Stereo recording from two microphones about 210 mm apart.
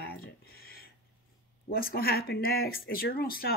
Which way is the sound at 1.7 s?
45° left (ahead or behind).